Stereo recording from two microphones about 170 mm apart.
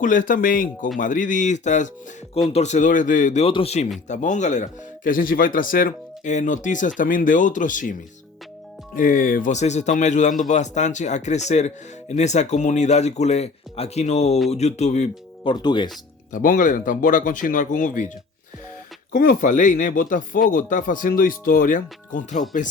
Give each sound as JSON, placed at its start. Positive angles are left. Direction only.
{"t": 0.0, "sound": "speech", "side_deg": 50}
{"t": 3.4, "sound": "speech", "side_deg": 35}
{"t": 9.0, "sound": "speech", "side_deg": 55}
{"t": 15.4, "sound": "speech", "side_deg": 25}
{"t": 16.3, "sound": "speech", "side_deg": 55}
{"t": 19.1, "sound": "speech", "side_deg": 55}